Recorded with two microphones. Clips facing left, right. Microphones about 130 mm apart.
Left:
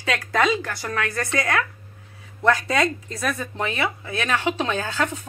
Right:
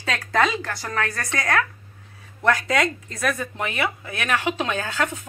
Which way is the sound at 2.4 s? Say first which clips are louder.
Left 1 dB; 25° left (ahead or behind).